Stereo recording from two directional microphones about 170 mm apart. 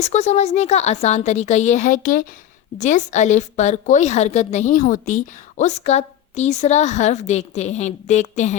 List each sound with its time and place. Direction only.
0.0 s a woman's voice: 40° left (ahead or behind)